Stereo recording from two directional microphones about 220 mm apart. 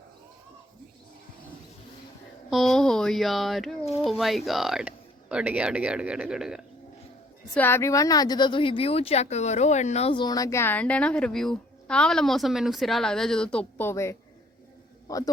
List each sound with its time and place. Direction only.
2.5 s speech: centre (ahead or behind)
7.5 s a man's voice: 10° left (ahead or behind)